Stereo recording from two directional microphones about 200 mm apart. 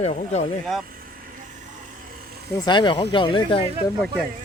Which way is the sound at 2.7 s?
25° left (ahead or behind).